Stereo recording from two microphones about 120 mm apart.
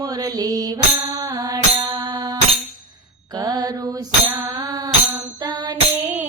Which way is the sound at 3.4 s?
35° right (ahead or behind).